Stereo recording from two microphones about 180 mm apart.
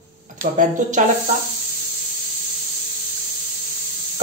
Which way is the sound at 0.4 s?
45° right (ahead or behind).